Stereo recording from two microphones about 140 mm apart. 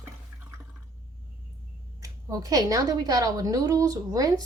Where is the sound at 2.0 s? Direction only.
25° right (ahead or behind).